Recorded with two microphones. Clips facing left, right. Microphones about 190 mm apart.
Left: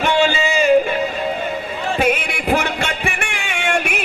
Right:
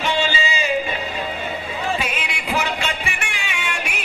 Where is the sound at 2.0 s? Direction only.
50° left (ahead or behind).